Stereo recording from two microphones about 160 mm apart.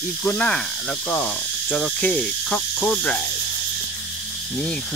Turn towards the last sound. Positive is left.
turn(degrees=5)  # may be behind; listen again after turning